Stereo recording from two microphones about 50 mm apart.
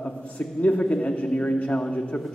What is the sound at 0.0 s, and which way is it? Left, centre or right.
A man's voice, left.